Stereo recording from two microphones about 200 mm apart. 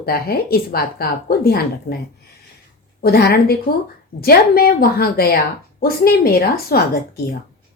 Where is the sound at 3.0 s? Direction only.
50° left (ahead or behind).